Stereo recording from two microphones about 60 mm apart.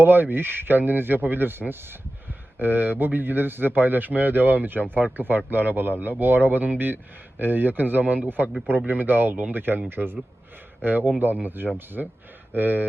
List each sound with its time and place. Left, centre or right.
0.0 s a man's voice: right
12.0 s speech: centre
12.5 s a man's voice: right